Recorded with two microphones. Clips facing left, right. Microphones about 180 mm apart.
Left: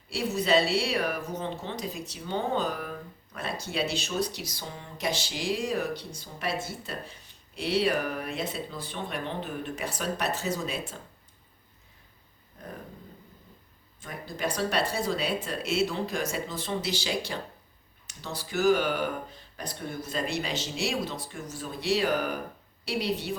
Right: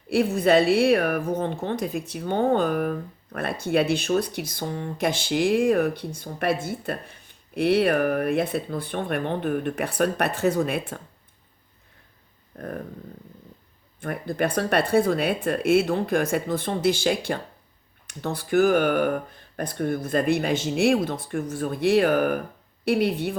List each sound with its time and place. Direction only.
0.1 s speech: 55° right (ahead or behind)
14.0 s speech: 60° right (ahead or behind)